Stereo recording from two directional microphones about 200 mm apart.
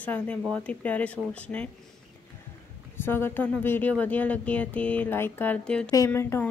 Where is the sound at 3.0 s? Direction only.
10° left (ahead or behind).